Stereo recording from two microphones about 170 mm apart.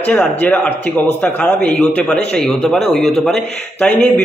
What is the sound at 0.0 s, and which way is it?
A man's voice, 5° left (ahead or behind).